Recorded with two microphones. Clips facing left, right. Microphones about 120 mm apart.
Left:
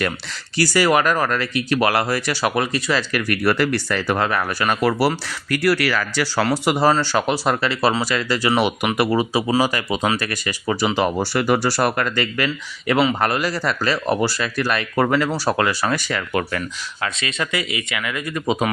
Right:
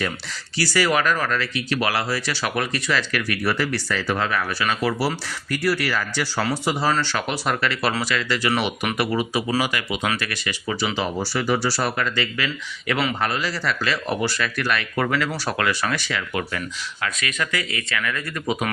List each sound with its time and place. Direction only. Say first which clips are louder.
0.5 s speech: left 4 dB; 45° left (ahead or behind)
2.4 s speech: left 4 dB; 35° left (ahead or behind)
3.4 s speech: left 6 dB; 65° left (ahead or behind)
6.8 s speech: left 7 dB; 40° left (ahead or behind)
12.9 s speech: left 6 dB; 25° left (ahead or behind)
13.1 s speech: left 4 dB; 50° left (ahead or behind)
17.0 s speech: left 2 dB; 25° left (ahead or behind)